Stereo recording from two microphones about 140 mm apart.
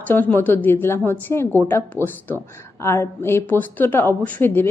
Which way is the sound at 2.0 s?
15° right (ahead or behind).